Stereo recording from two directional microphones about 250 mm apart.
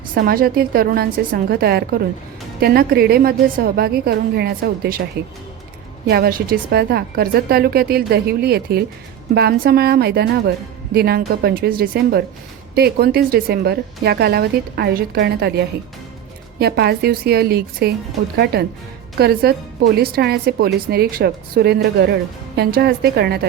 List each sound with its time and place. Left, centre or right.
0.1 s a woman's voice: right
6.1 s a woman's voice: right